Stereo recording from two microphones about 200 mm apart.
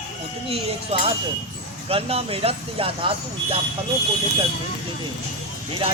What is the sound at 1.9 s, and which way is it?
Speech, 30° right (ahead or behind).